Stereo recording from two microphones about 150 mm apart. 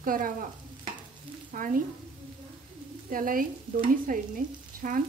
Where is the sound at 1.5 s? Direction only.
65° right (ahead or behind).